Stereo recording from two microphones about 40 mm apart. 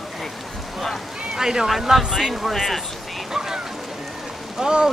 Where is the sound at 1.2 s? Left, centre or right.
Centre.